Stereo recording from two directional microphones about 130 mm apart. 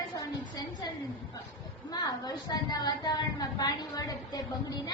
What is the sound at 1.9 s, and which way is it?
A woman's voice, 30° left (ahead or behind).